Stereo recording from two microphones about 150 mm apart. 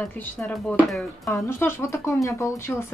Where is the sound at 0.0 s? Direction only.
5° left (ahead or behind).